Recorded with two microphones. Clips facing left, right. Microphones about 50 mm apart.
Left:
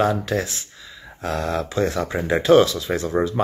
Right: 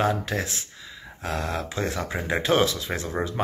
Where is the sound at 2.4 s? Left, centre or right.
Right.